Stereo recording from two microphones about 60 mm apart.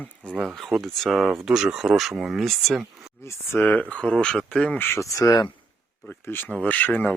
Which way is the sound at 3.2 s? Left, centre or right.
Left.